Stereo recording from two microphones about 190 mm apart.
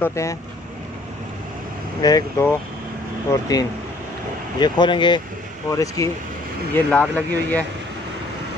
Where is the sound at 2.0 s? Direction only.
20° left (ahead or behind).